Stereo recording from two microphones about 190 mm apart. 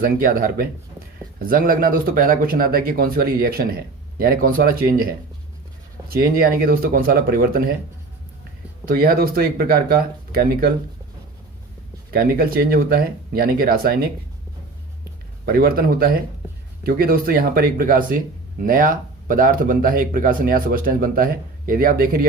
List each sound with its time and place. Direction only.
0.0 s speech: 50° right (ahead or behind)
6.1 s speech: 50° right (ahead or behind)
8.9 s speech: 50° right (ahead or behind)
12.1 s speech: 50° right (ahead or behind)
15.4 s speech: 55° right (ahead or behind)